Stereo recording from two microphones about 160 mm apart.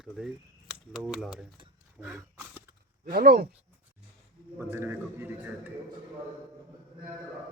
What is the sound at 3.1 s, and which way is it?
Speech, 75° right (ahead or behind).